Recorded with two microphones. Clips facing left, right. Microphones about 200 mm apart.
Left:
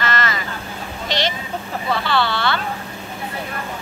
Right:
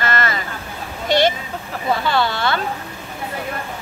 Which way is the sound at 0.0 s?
50° right (ahead or behind).